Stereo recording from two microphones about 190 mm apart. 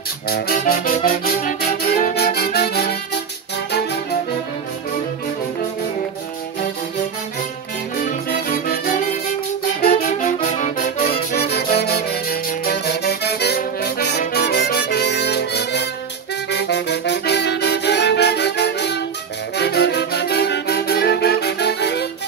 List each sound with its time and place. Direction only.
0.3 s music: 50° left (ahead or behind)
8.0 s music: 50° left (ahead or behind)
11.3 s music: 55° left (ahead or behind)